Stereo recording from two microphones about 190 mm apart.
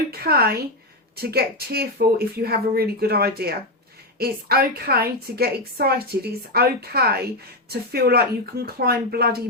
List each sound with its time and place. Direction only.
0.1 s a woman's voice: 55° right (ahead or behind)